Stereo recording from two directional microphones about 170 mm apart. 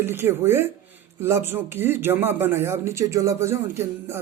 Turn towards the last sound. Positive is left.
turn(degrees=-15)  # may be behind; listen again after turning